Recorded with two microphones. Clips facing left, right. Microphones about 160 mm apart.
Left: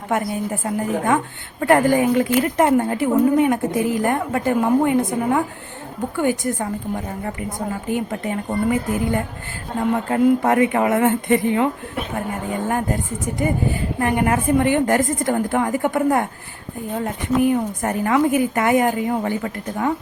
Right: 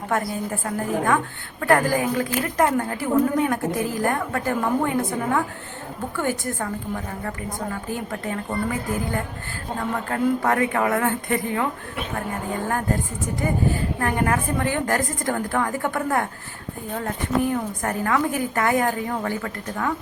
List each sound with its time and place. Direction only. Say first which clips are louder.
0.1 s a woman's voice: left 3 dB; 20° left (ahead or behind)
9.9 s a woman's voice: left 6 dB; 20° left (ahead or behind)
14.0 s a woman's voice: left 5 dB; 20° left (ahead or behind)